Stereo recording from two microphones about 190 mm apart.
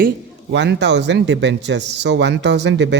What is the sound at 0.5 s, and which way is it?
Speech, 65° right (ahead or behind).